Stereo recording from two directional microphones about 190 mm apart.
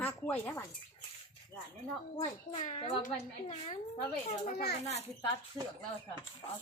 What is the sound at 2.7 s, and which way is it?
A woman's voice, 25° left (ahead or behind).